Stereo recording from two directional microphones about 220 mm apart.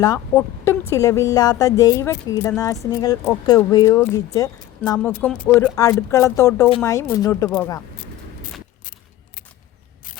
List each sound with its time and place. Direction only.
0.0 s speech: 15° left (ahead or behind)